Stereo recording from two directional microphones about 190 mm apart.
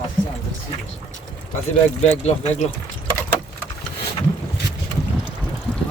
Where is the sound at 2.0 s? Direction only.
35° left (ahead or behind).